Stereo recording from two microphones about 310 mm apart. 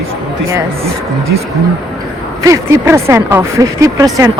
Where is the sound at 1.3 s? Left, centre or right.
Right.